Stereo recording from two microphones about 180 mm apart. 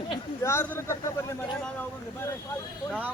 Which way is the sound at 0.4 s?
15° left (ahead or behind).